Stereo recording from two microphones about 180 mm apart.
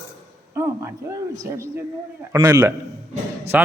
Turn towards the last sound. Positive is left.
turn(degrees=-10)  # may be behind; listen again after turning